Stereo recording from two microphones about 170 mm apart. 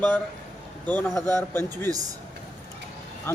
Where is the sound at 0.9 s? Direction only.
10° left (ahead or behind).